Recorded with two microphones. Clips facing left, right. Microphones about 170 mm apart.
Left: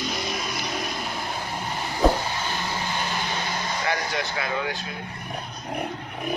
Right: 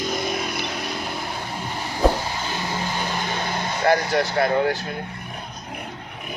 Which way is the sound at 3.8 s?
50° right (ahead or behind).